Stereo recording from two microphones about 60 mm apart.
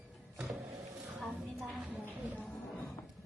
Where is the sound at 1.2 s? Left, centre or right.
Centre.